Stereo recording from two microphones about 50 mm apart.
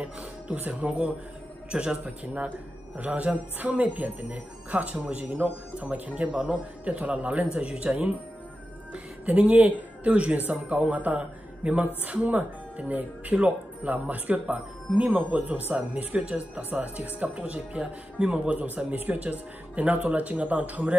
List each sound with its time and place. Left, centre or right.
0.0 s speech: right
2.0 s speech: right